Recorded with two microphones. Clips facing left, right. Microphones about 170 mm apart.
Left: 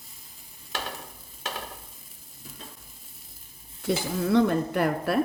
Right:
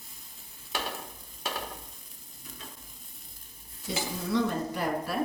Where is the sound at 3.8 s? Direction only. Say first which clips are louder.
Left 7 dB; 60° left (ahead or behind).